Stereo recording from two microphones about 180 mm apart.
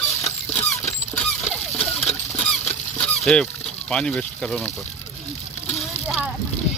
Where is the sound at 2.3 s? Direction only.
5° left (ahead or behind).